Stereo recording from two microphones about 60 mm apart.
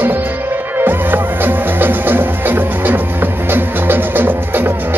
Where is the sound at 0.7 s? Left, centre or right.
Right.